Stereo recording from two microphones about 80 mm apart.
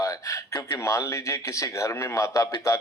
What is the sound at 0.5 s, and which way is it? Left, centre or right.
Speech, left.